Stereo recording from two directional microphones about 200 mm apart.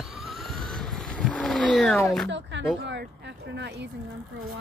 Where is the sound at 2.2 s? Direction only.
65° right (ahead or behind).